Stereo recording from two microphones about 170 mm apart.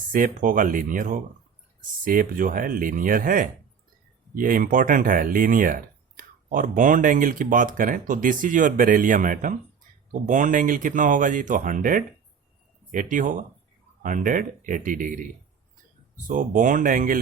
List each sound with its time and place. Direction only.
0.1 s speech: 50° right (ahead or behind)